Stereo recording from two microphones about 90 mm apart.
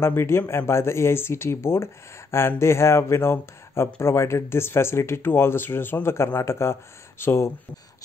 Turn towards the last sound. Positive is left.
turn(degrees=30)  # may be behind; listen again after turning